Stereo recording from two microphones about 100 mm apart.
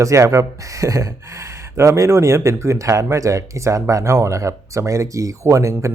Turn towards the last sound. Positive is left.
turn(degrees=-30)  # may be behind; listen again after turning